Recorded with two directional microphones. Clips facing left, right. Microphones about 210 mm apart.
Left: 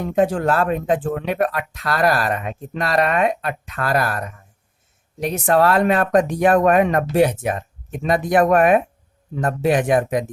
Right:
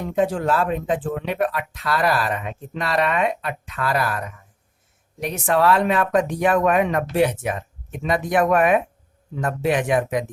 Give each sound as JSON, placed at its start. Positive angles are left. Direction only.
{"t": 0.2, "sound": "speech", "side_deg": 50}